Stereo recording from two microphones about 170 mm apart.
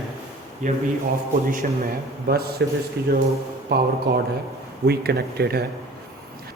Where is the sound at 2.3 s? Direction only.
65° right (ahead or behind).